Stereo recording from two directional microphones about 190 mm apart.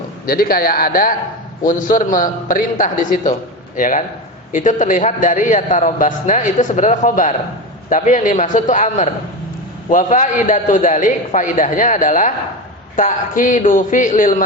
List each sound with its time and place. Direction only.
0.3 s a man's voice: 50° left (ahead or behind)